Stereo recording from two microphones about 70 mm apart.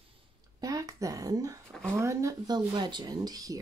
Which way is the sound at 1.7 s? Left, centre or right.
Centre.